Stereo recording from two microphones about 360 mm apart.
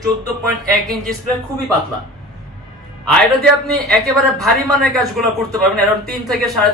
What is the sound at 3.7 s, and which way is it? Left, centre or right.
Speech, centre.